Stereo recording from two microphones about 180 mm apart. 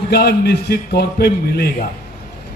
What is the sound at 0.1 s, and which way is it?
A man's voice, 60° left (ahead or behind).